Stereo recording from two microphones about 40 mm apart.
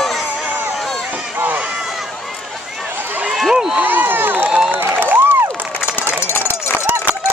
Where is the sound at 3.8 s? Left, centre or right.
Right.